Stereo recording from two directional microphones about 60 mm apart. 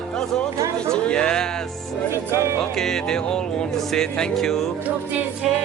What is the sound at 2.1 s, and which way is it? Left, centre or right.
Speech, right.